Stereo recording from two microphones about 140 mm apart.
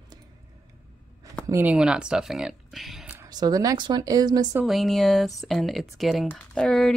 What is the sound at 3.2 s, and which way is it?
Speech, 25° right (ahead or behind).